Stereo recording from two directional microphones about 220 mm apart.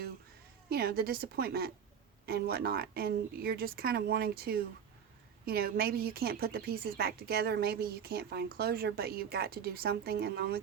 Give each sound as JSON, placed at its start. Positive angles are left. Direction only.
{"t": 0.7, "sound": "speech", "side_deg": -45}